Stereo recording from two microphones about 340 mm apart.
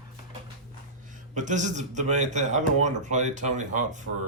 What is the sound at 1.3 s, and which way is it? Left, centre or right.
Speech, right.